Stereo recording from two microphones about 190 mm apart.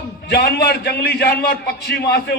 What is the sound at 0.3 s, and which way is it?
A man's voice, 60° left (ahead or behind).